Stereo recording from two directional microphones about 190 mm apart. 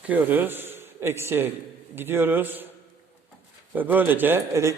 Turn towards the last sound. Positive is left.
turn(degrees=-15)  # may be behind; listen again after turning